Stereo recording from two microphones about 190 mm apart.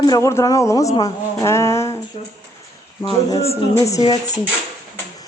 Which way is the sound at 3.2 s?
35° left (ahead or behind).